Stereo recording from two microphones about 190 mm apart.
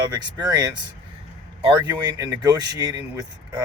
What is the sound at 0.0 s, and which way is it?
Speech, 25° right (ahead or behind).